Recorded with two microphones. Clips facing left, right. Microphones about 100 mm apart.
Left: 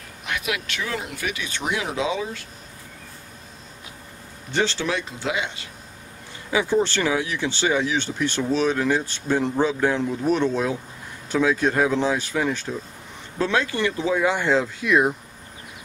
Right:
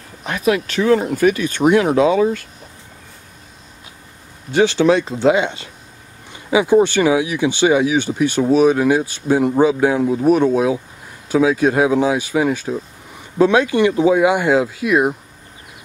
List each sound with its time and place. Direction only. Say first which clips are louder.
0.2 s speech: right 10 dB; 35° right (ahead or behind); by 2.4 s 55° right (ahead or behind)
4.5 s speech: right 8 dB; 10° right (ahead or behind)
4.8 s speech: right 13 dB; 30° right (ahead or behind)
6.5 s speech: right 8 dB; 15° right (ahead or behind)